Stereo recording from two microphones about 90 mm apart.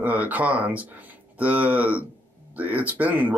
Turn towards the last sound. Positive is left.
turn(degrees=-20)  # may be behind; listen again after turning